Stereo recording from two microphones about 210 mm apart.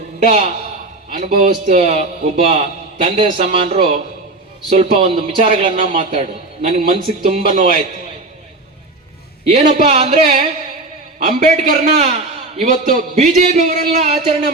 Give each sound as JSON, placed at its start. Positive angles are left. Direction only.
{"t": 0.3, "sound": "a man's voice", "side_deg": -30}
{"t": 9.5, "sound": "a man's voice", "side_deg": -35}
{"t": 10.2, "sound": "music", "side_deg": -45}
{"t": 11.3, "sound": "a man's voice", "side_deg": -30}